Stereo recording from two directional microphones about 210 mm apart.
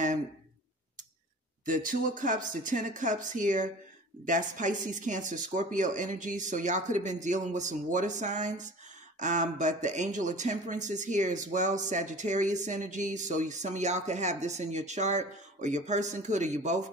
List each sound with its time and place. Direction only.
1.7 s speech: 40° right (ahead or behind)